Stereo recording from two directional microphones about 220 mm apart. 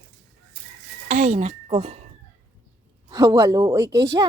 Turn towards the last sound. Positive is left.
turn(degrees=-15)  # may be behind; listen again after turning